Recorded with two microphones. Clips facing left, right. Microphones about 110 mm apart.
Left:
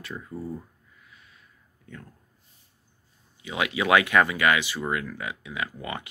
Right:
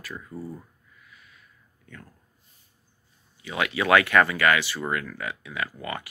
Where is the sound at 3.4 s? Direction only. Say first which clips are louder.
Right 1 dB; 15° left (ahead or behind).